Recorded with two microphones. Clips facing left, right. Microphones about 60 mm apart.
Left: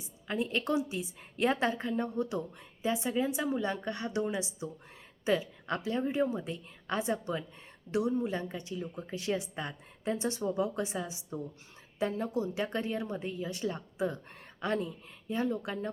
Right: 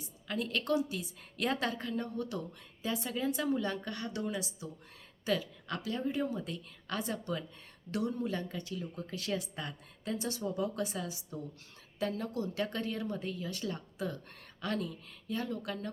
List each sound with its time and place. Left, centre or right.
0.0 s a woman's voice: left